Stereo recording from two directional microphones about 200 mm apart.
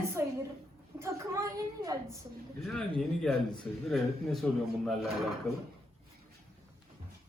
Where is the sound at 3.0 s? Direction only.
Centre (ahead or behind).